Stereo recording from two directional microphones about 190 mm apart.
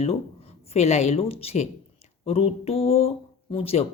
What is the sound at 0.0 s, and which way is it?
A woman's voice, 30° left (ahead or behind).